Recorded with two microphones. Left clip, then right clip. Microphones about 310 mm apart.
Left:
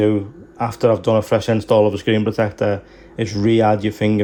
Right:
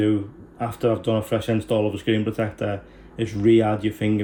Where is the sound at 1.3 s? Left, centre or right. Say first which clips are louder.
Left 7 dB; left.